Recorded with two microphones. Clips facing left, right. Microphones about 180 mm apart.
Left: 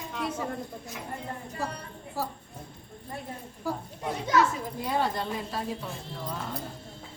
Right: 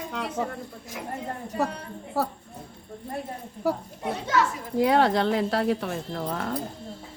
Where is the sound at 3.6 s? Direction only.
70° right (ahead or behind).